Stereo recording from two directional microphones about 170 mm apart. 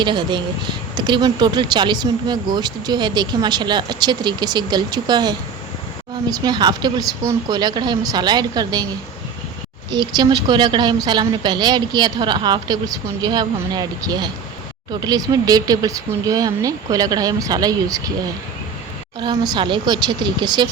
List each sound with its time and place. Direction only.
0.0 s speech: 25° right (ahead or behind)
6.4 s speech: 25° right (ahead or behind)
9.9 s speech: 25° right (ahead or behind)
19.2 s speech: 25° right (ahead or behind)